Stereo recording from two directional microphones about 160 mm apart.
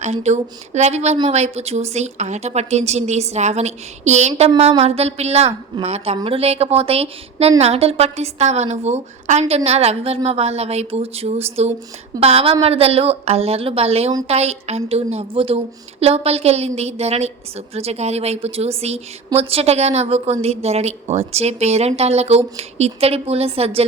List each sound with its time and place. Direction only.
0.0 s a woman's voice: 45° right (ahead or behind)